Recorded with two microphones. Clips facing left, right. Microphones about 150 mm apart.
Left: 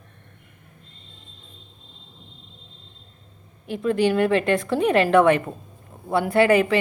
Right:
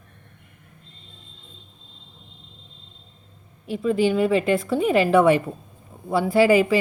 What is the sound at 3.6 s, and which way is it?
A woman's voice, centre (ahead or behind).